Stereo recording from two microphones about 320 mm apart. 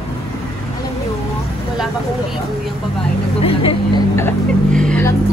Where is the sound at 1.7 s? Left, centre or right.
Centre.